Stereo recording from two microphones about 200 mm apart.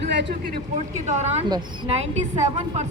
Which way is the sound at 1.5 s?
20° right (ahead or behind).